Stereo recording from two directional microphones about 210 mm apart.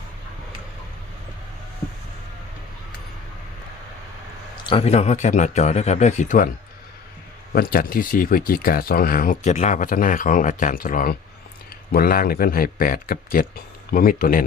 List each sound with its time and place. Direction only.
4.7 s speech: 30° left (ahead or behind)
7.5 s speech: 45° left (ahead or behind)